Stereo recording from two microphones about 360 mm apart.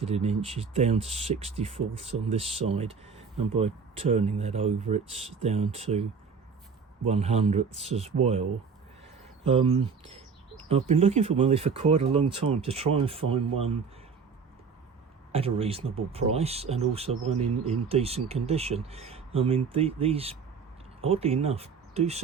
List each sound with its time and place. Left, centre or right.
0.0 s speech: centre
15.3 s speech: centre